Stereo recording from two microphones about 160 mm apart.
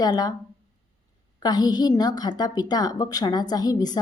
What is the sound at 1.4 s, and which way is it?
A woman's voice, 25° left (ahead or behind).